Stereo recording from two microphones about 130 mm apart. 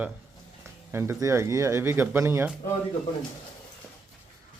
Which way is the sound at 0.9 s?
20° right (ahead or behind).